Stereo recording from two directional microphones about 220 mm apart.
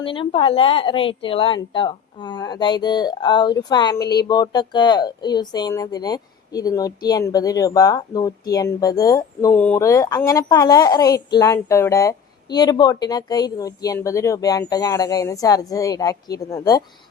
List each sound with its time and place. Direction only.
0.0 s speech: 25° left (ahead or behind)